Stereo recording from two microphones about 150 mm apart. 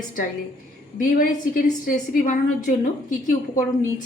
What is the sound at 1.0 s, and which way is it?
A woman's voice, 70° left (ahead or behind).